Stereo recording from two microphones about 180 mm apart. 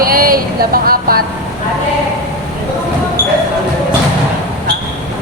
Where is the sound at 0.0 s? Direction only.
55° right (ahead or behind).